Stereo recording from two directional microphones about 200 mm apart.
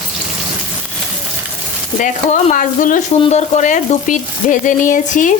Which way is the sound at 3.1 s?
30° left (ahead or behind).